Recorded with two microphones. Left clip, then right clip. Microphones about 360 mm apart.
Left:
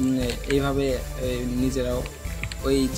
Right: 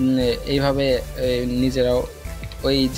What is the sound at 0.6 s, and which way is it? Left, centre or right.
Speech, right.